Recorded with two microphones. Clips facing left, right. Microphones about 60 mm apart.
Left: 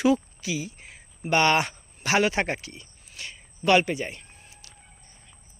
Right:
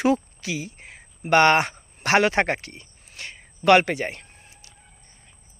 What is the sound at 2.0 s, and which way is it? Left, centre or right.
A man's voice, right.